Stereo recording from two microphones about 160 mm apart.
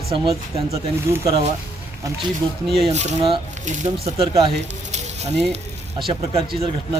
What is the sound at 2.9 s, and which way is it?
Speech, 45° right (ahead or behind).